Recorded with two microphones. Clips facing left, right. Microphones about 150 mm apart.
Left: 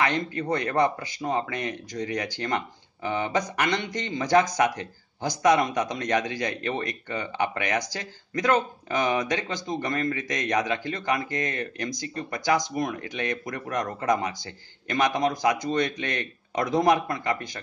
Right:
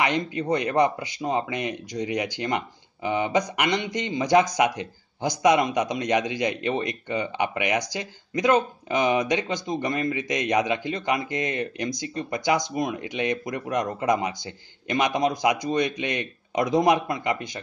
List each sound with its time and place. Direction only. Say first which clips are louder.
0.0 s speech: right 1 dB; 15° right (ahead or behind)